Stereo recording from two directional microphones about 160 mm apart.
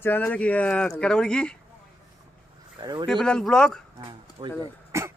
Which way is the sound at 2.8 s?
25° right (ahead or behind).